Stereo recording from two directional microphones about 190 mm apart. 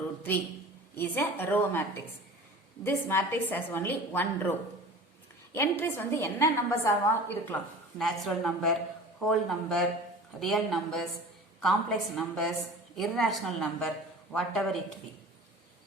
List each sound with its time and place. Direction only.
0.9 s a woman's voice: 10° left (ahead or behind)
2.8 s a woman's voice: 10° left (ahead or behind)
5.5 s a woman's voice: 15° left (ahead or behind)
7.9 s a woman's voice: centre (ahead or behind)